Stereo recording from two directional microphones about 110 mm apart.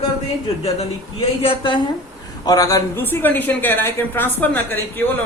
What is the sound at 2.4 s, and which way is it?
Speech, 35° left (ahead or behind).